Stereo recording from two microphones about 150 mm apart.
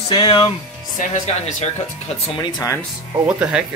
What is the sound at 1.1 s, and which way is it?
Speech, 45° left (ahead or behind).